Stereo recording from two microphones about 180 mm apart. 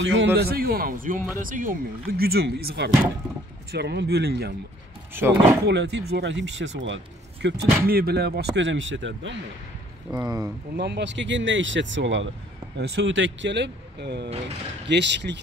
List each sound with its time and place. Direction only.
0.0 s a man's voice: 90° right
0.4 s speech: 60° right (ahead or behind)
5.1 s speech: 15° right (ahead or behind)
5.7 s speech: 70° right (ahead or behind); by 7.0 s 90° right
7.4 s speech: 60° right (ahead or behind); by 9.4 s 90° right
10.1 s speech: 20° right (ahead or behind)
10.8 s speech: 75° right (ahead or behind); by 12.3 s 90° right
12.7 s speech: 70° right (ahead or behind)